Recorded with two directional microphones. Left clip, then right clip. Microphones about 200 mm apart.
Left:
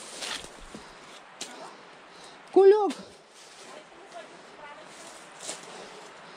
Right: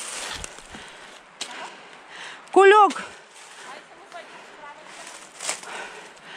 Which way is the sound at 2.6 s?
10° right (ahead or behind).